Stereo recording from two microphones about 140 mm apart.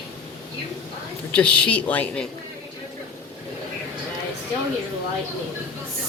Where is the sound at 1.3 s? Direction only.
10° left (ahead or behind).